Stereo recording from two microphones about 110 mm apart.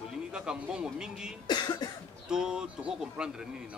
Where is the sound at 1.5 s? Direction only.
40° left (ahead or behind).